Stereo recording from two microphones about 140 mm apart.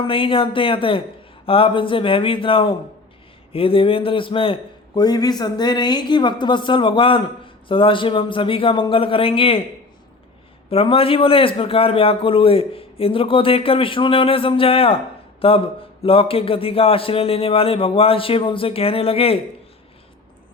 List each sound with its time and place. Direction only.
0.0 s a man's voice: 40° left (ahead or behind)
10.7 s a man's voice: 40° left (ahead or behind)